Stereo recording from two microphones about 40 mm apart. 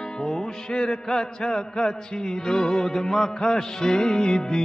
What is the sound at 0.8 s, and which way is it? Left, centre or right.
Music, centre.